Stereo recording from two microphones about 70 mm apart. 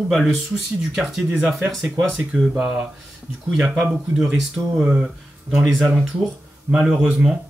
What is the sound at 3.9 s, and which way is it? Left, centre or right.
Speech, centre.